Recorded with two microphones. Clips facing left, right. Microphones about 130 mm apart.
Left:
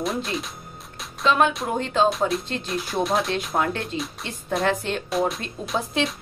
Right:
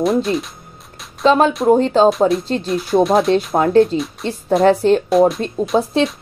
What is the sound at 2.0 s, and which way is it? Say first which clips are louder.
Speech: right 9 dB; centre (ahead or behind).